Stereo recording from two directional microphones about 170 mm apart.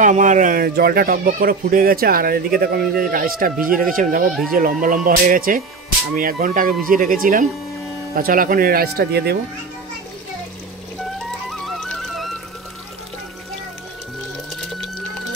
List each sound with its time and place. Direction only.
0.0 s speech: 50° right (ahead or behind); by 9.4 s 70° right (ahead or behind)
11.1 s music: centre (ahead or behind)